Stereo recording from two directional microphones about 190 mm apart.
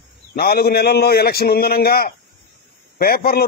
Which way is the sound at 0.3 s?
55° left (ahead or behind).